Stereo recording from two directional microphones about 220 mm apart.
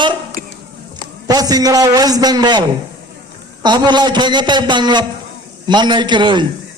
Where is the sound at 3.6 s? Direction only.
20° right (ahead or behind).